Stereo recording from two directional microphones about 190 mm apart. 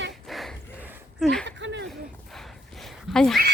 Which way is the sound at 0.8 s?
10° right (ahead or behind).